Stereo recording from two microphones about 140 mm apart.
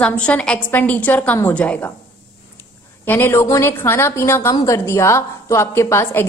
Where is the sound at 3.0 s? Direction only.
15° left (ahead or behind).